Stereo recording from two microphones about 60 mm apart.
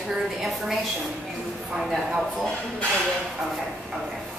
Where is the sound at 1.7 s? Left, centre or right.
Centre.